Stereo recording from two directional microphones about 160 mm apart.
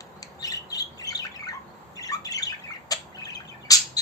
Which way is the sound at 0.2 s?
20° left (ahead or behind).